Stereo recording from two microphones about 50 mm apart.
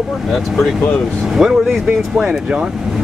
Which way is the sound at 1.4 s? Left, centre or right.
Centre.